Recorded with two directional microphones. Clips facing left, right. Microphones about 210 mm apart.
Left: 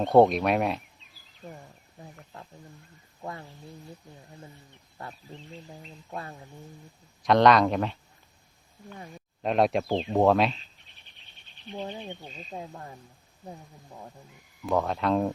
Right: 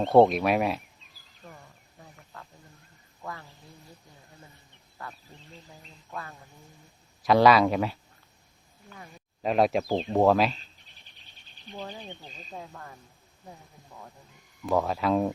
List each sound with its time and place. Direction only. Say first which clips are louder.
0.1 s speech: even; centre (ahead or behind)
1.4 s speech: left 5 dB; 20° left (ahead or behind)
2.3 s a sound: even; 25° left (ahead or behind)
3.2 s speech: left 2 dB; 25° left (ahead or behind)
6.1 s speech: left 2 dB; 30° left (ahead or behind)
7.2 s speech: even; 5° right (ahead or behind)
9.4 s speech: even; centre (ahead or behind)
11.7 s speech: left 3 dB; 25° left (ahead or behind)
14.6 s speech: even; centre (ahead or behind)